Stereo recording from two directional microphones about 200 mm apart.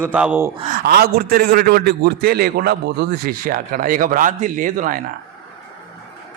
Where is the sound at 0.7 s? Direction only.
50° right (ahead or behind).